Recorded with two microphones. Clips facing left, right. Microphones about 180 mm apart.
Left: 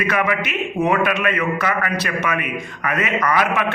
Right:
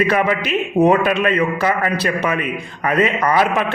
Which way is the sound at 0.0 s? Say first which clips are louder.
Right 4 dB; 30° right (ahead or behind).